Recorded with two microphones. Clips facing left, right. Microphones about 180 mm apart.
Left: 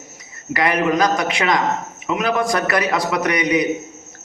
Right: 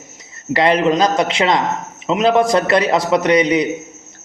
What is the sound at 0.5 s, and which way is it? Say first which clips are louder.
A man's voice: right 4 dB; 25° right (ahead or behind).